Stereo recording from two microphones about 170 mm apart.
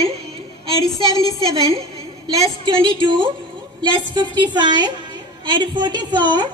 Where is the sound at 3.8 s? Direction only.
25° right (ahead or behind).